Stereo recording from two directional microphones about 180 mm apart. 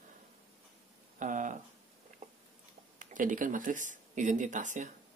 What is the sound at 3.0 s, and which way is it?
Speech, 45° right (ahead or behind).